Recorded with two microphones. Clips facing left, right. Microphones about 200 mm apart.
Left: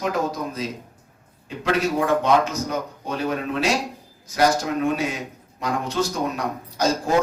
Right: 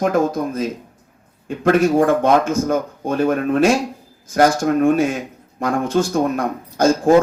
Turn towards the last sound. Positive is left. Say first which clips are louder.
# right 8 dB
turn(degrees=-50)  # may be behind; listen again after turning